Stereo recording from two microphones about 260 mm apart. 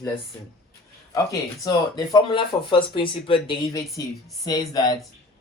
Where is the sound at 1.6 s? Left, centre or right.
Centre.